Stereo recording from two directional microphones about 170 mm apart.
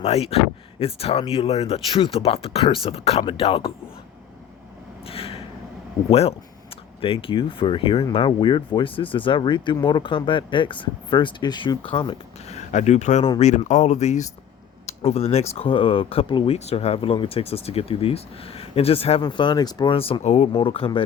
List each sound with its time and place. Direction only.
0.0 s speech: 35° left (ahead or behind)
5.0 s a sound: 35° left (ahead or behind)
6.1 s speech: 35° left (ahead or behind)